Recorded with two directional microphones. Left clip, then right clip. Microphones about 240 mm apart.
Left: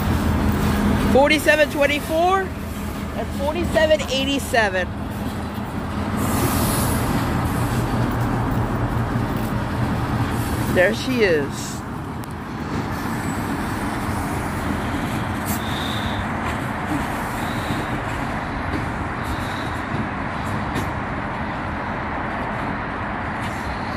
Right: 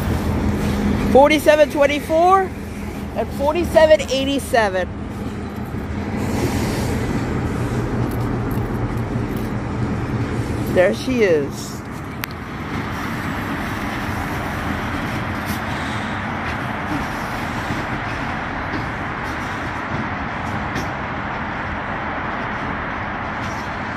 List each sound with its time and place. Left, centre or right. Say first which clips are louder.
1.1 s speech: right 4 dB; right
3.5 s speech: right 5 dB; right
10.8 s speech: right 2 dB; centre